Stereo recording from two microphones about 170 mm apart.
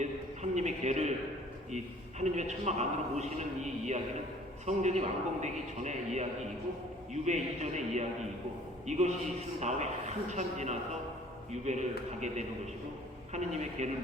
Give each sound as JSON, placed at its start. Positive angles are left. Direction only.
{"t": 0.5, "sound": "a sound", "side_deg": -40}
{"t": 1.7, "sound": "a man's voice", "side_deg": -40}
{"t": 7.1, "sound": "a man's voice", "side_deg": -40}